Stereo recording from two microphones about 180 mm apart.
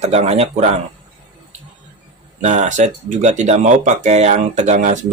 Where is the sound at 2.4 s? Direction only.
40° right (ahead or behind).